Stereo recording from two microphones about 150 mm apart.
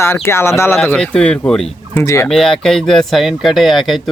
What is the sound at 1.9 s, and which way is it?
Speech, 20° left (ahead or behind).